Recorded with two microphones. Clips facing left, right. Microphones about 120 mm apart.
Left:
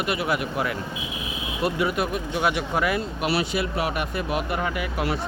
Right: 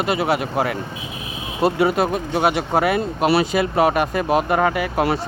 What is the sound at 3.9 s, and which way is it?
Speech, 90° right.